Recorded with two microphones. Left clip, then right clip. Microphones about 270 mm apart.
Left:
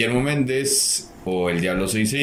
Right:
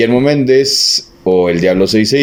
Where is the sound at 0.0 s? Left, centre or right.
Right.